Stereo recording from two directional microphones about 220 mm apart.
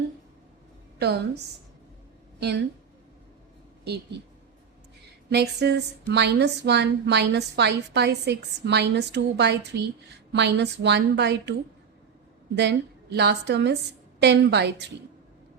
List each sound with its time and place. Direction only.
0.9 s a woman's voice: 50° right (ahead or behind)
2.4 s a woman's voice: 50° right (ahead or behind)
5.3 s a woman's voice: 50° right (ahead or behind)
12.5 s a woman's voice: 50° right (ahead or behind)